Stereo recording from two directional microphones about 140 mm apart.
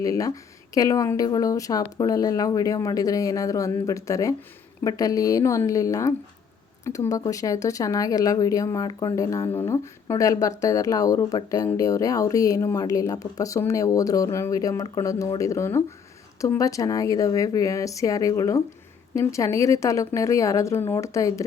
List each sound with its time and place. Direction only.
0.0 s speech: 25° left (ahead or behind)